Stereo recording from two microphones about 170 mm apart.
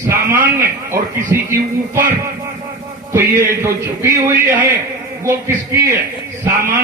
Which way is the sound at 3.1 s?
15° right (ahead or behind).